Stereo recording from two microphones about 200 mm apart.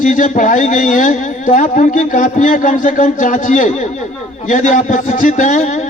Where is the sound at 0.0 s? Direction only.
40° left (ahead or behind).